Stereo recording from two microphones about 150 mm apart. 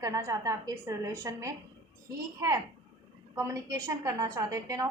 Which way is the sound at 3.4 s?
20° right (ahead or behind).